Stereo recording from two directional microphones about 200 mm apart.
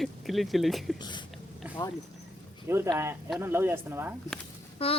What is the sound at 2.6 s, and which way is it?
Speech, 10° right (ahead or behind).